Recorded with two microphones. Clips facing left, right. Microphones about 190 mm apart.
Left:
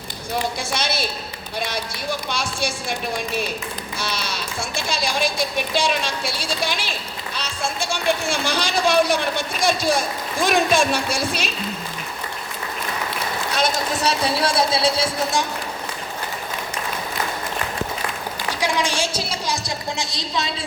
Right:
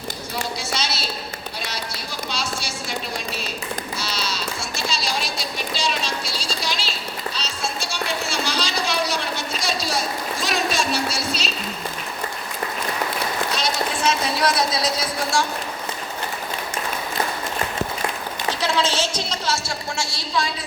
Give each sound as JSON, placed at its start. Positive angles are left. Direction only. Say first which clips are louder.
{"t": 0.7, "sound": "speech", "louder": "left 3 dB", "side_deg": 55}
{"t": 3.9, "sound": "speech", "louder": "even", "side_deg": 55}
{"t": 14.0, "sound": "speech", "louder": "even", "side_deg": 35}
{"t": 18.6, "sound": "a woman's voice", "louder": "even", "side_deg": 15}